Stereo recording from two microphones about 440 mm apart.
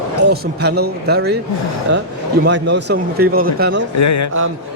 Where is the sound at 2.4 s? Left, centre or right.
Right.